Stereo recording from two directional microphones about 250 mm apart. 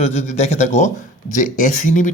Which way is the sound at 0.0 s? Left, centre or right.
Left.